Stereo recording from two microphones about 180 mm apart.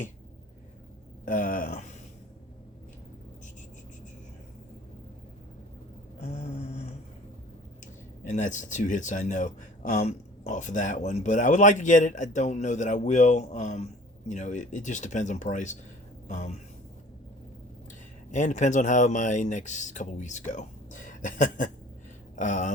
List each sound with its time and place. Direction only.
1.2 s speech: 45° left (ahead or behind)
6.1 s a sound: 40° left (ahead or behind)
8.2 s speech: 40° left (ahead or behind)
18.3 s speech: 45° left (ahead or behind)